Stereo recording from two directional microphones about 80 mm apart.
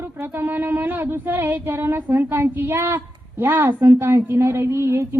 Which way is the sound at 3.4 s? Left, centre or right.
Right.